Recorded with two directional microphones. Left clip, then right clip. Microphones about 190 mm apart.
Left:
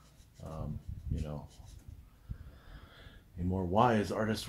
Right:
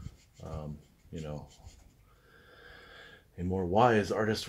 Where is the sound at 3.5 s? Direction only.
35° right (ahead or behind).